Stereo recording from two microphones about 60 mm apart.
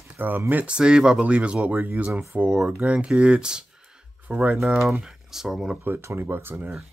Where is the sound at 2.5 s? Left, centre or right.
Centre.